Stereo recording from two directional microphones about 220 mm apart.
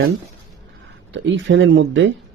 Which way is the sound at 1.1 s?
55° right (ahead or behind).